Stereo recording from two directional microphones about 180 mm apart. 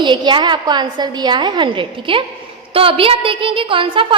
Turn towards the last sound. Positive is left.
turn(degrees=-30)  # may be behind; listen again after turning